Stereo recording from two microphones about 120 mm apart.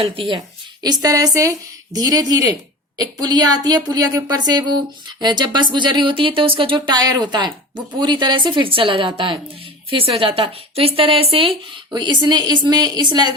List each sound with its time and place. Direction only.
0.0 s speech: 50° right (ahead or behind)
0.3 s speech: 35° right (ahead or behind)
11.9 s speech: 40° right (ahead or behind)